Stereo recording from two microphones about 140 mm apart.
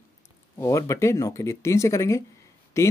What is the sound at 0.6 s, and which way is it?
Speech, 20° left (ahead or behind).